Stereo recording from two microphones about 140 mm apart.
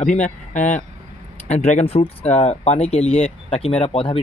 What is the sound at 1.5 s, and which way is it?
Speech, 50° left (ahead or behind).